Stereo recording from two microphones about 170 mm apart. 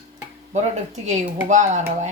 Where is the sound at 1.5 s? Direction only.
45° right (ahead or behind).